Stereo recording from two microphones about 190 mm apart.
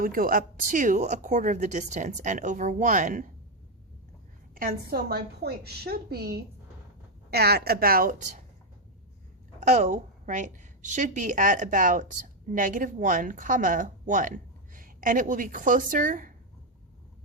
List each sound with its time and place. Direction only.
0.0 s a woman's voice: 50° right (ahead or behind)
4.5 s a woman's voice: 50° right (ahead or behind)
9.6 s a woman's voice: 40° right (ahead or behind)